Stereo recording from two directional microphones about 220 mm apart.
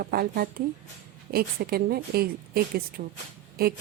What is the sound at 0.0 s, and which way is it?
A woman's voice, 45° right (ahead or behind).